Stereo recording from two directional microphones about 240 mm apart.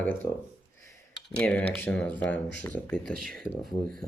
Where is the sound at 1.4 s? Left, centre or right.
Centre.